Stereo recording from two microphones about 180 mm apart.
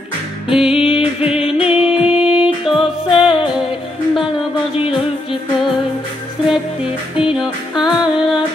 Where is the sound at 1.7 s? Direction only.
5° right (ahead or behind).